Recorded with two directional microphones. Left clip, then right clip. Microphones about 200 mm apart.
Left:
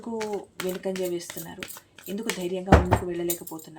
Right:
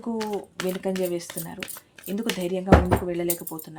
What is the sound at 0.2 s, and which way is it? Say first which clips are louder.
Speech: even; 10° right (ahead or behind).